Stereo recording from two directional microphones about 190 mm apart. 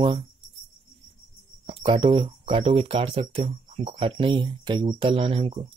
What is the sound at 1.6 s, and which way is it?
Speech, 30° right (ahead or behind).